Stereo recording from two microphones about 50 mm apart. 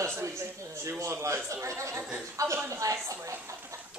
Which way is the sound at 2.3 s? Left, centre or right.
Right.